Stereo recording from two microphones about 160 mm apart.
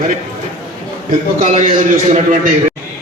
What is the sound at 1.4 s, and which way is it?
A man's voice, 55° right (ahead or behind).